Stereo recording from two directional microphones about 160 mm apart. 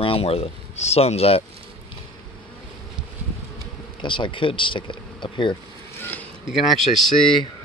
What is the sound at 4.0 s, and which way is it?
Speech, 30° left (ahead or behind).